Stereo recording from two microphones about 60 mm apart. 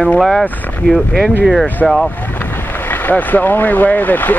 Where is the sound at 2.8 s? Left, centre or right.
Left.